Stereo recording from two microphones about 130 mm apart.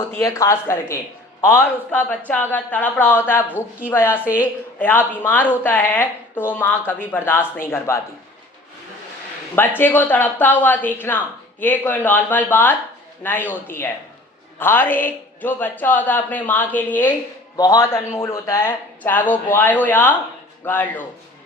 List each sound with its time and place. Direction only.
0.2 s a woman's voice: 25° left (ahead or behind)
9.6 s a woman's voice: 15° left (ahead or behind)
17.6 s a woman's voice: 25° left (ahead or behind)